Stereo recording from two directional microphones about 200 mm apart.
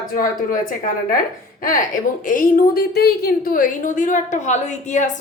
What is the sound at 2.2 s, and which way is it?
A woman's voice, 45° left (ahead or behind).